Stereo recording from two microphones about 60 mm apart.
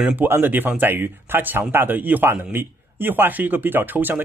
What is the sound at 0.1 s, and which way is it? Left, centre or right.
Speech, right.